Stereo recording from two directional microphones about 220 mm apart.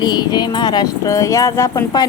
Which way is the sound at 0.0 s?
20° left (ahead or behind).